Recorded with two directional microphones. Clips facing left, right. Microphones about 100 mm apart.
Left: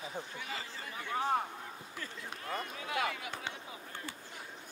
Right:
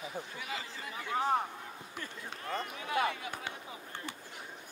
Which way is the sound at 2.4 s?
30° right (ahead or behind).